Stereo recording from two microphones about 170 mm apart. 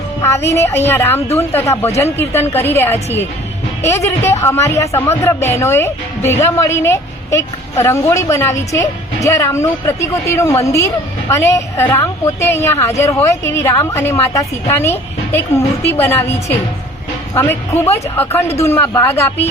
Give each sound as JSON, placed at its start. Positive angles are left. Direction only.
{"t": 0.2, "sound": "speech", "side_deg": 15}
{"t": 18.6, "sound": "speech", "side_deg": 15}